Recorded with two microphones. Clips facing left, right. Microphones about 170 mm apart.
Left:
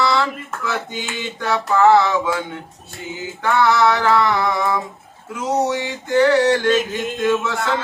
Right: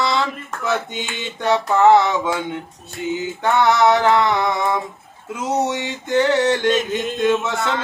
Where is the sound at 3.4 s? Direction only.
20° right (ahead or behind).